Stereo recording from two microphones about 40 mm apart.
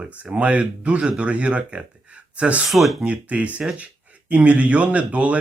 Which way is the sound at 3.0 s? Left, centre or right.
Right.